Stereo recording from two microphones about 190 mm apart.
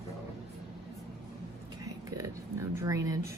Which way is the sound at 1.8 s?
15° right (ahead or behind).